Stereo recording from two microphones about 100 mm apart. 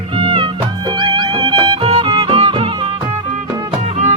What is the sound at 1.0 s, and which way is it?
Music, 50° right (ahead or behind).